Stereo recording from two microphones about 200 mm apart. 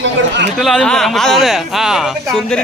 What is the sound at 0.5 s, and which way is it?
Speech, centre (ahead or behind).